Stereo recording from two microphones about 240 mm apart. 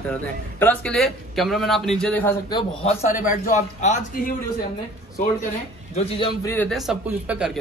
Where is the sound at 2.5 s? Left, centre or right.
Left.